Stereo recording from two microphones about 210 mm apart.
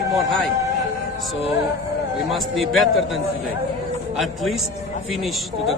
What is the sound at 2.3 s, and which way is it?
Speech, centre (ahead or behind).